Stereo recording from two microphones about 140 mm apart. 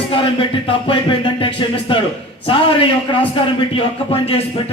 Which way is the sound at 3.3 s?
40° left (ahead or behind).